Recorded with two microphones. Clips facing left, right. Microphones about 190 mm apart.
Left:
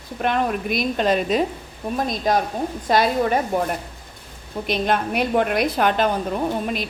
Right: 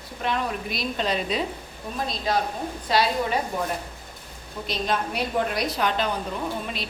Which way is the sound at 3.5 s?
60° left (ahead or behind).